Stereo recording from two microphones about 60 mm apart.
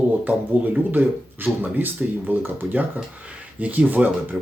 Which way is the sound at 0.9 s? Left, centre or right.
Right.